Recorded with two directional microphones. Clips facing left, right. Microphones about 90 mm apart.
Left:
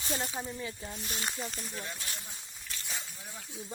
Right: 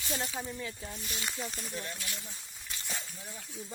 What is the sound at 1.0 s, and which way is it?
Speech, 40° left (ahead or behind).